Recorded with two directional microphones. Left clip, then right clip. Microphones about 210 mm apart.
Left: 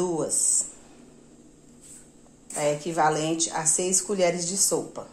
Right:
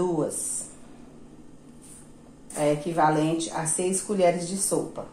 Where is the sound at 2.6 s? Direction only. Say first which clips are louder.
Right 1 dB; 50° left (ahead or behind).